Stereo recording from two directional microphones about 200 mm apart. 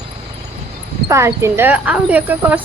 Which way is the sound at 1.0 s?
15° right (ahead or behind).